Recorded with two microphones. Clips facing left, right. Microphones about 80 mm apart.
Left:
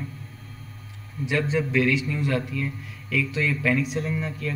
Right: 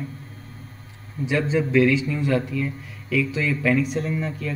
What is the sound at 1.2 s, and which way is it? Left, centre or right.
Speech, right.